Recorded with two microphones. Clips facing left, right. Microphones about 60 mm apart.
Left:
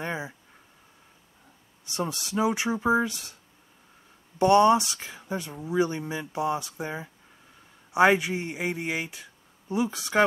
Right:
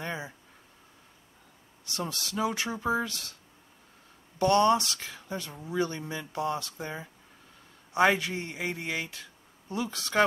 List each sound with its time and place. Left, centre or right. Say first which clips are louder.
0.0 s a sound: left 3 dB; centre
1.9 s speech: left 4 dB; centre
4.4 s speech: left 4 dB; centre